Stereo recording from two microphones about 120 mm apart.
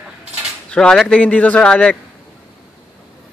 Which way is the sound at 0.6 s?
5° left (ahead or behind).